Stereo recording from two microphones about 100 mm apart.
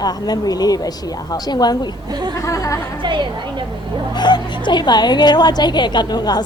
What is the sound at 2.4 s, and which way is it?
Speech, 35° left (ahead or behind).